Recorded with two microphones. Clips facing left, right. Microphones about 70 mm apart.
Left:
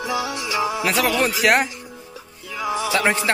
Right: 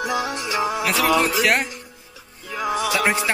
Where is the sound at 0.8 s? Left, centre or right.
Centre.